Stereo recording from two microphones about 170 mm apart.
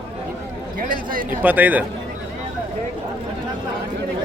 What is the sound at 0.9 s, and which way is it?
Speech, 55° right (ahead or behind).